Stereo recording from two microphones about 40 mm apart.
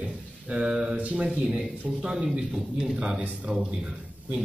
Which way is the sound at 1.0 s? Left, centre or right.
Right.